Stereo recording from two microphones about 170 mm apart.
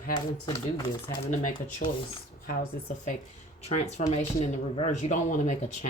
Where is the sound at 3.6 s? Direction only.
40° left (ahead or behind).